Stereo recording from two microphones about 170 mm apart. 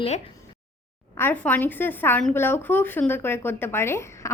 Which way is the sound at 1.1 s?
10° left (ahead or behind).